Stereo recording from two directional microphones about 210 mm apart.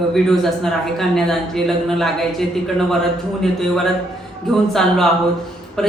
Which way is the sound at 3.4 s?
Centre (ahead or behind).